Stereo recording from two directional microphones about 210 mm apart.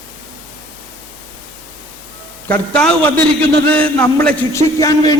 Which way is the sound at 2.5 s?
5° left (ahead or behind).